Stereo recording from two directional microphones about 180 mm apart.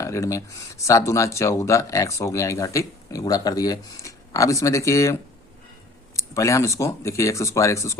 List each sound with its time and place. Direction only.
0.0 s speech: 15° left (ahead or behind)
6.1 s speech: 15° left (ahead or behind)